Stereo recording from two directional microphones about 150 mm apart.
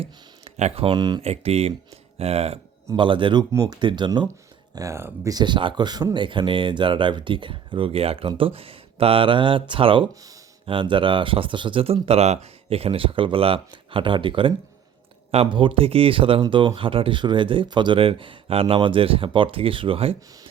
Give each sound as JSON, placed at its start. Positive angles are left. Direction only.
{"t": 0.0, "sound": "speech", "side_deg": -45}
{"t": 1.2, "sound": "speech", "side_deg": -45}
{"t": 2.9, "sound": "speech", "side_deg": -35}
{"t": 3.5, "sound": "speech", "side_deg": -25}
{"t": 4.7, "sound": "speech", "side_deg": -20}